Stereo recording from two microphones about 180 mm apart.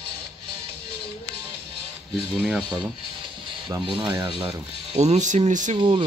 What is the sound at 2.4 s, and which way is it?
Speech, centre (ahead or behind).